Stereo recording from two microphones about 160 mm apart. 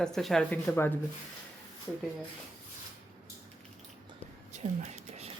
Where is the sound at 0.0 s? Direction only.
Centre (ahead or behind).